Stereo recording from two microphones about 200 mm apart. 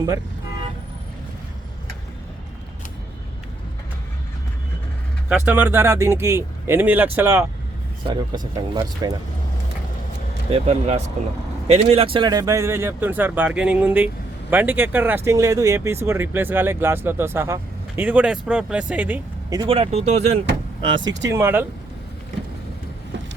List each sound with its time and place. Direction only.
5.3 s speech: 10° right (ahead or behind)
8.0 s speech: 20° right (ahead or behind)
10.5 s speech: 35° right (ahead or behind); by 19.2 s 5° right (ahead or behind)
19.5 s speech: 25° right (ahead or behind)
21.2 s speech: 10° right (ahead or behind)